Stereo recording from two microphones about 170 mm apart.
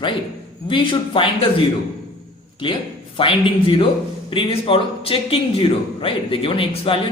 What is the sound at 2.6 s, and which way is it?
A man's voice, 30° left (ahead or behind).